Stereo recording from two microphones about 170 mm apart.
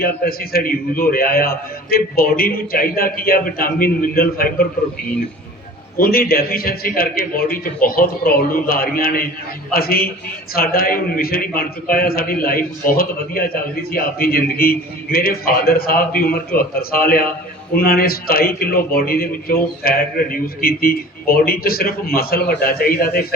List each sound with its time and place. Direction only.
0.0 s a man's voice: 60° left (ahead or behind)
6.0 s a man's voice: 60° left (ahead or behind)